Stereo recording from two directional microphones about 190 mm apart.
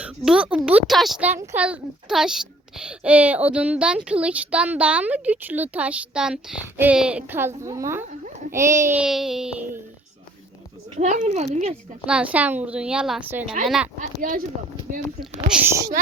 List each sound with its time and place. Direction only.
0.0 s speech: 5° right (ahead or behind)
10.9 s a child's voice: 40° right (ahead or behind)
12.0 s a woman's voice: 5° right (ahead or behind)
13.4 s a child's voice: 40° right (ahead or behind)
13.7 s a woman's voice: 5° right (ahead or behind)
14.2 s speech: 45° right (ahead or behind)
15.2 s speech: 5° right (ahead or behind)